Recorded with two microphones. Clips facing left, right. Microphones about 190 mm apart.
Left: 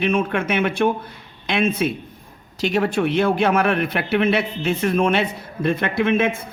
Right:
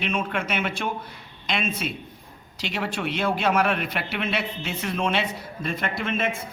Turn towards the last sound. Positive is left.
turn(degrees=55)  # may be behind; listen again after turning